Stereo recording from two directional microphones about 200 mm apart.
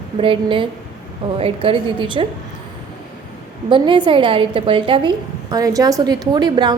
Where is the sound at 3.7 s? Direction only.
25° right (ahead or behind).